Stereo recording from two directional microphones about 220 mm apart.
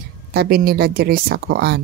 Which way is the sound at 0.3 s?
45° right (ahead or behind).